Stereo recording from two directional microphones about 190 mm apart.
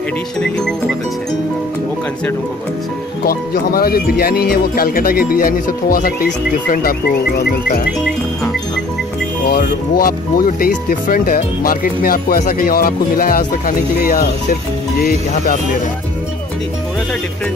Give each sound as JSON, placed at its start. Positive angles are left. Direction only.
{"t": 3.3, "sound": "speech", "side_deg": 55}
{"t": 9.5, "sound": "speech", "side_deg": 45}